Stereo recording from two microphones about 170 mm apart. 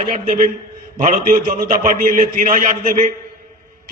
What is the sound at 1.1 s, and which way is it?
A man's voice, 50° right (ahead or behind).